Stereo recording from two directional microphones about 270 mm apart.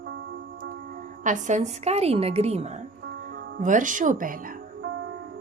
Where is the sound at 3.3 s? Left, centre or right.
Right.